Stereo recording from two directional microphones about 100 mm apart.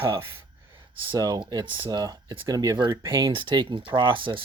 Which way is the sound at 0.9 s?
45° right (ahead or behind).